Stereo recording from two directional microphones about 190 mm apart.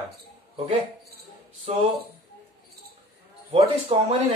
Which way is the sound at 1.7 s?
35° right (ahead or behind).